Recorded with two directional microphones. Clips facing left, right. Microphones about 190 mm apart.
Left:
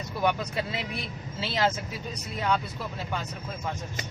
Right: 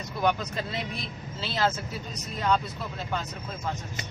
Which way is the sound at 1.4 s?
15° left (ahead or behind).